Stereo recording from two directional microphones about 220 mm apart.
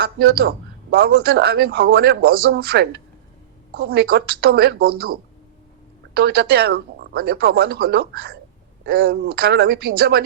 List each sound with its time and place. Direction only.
0.0 s speech: 45° right (ahead or behind)